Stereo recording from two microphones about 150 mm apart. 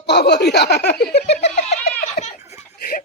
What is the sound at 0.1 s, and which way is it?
Speech, 90° left.